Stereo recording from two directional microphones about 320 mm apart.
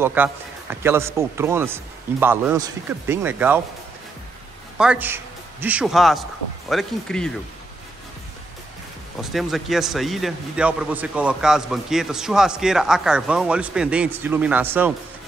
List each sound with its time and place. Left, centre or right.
0.0 s a man's voice: centre
4.7 s a man's voice: centre
9.2 s speech: centre